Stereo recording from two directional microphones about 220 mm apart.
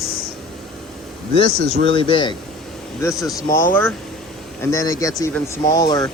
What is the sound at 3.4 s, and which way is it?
Speech, 15° left (ahead or behind).